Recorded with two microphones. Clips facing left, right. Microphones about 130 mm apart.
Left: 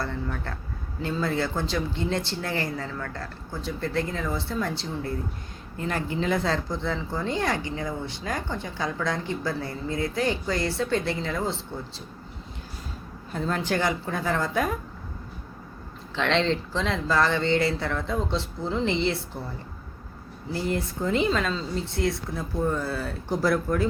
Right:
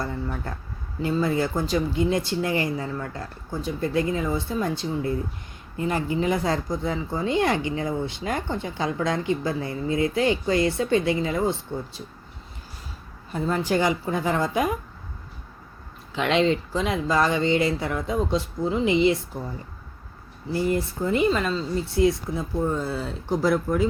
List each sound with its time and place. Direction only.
0.0 s speech: 10° right (ahead or behind)
13.3 s speech: 10° right (ahead or behind)
16.1 s speech: 10° right (ahead or behind)
20.5 s speech: 5° right (ahead or behind)